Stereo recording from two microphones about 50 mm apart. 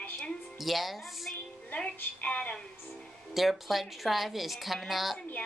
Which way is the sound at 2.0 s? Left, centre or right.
Left.